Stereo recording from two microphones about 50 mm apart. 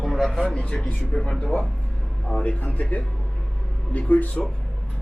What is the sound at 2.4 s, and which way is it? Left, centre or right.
Speech, left.